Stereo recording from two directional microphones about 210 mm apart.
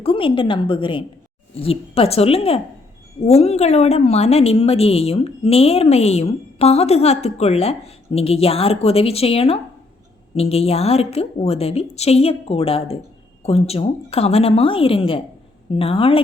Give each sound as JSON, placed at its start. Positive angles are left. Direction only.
{"t": 0.0, "sound": "a woman's voice", "side_deg": 25}